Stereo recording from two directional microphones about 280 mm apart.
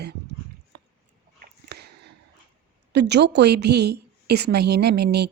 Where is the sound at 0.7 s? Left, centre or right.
Right.